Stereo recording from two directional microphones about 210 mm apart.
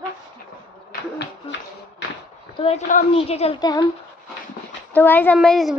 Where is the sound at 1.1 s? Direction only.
55° left (ahead or behind).